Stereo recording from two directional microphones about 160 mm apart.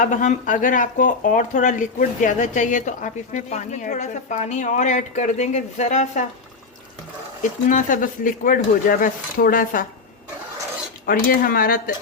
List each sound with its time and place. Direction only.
0.0 s speech: 50° left (ahead or behind)
7.7 s speech: 55° left (ahead or behind)
11.0 s speech: 65° left (ahead or behind)